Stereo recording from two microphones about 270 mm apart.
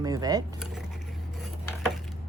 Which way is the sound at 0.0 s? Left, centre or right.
Centre.